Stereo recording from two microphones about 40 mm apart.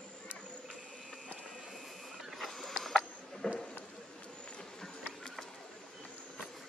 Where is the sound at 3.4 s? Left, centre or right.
Left.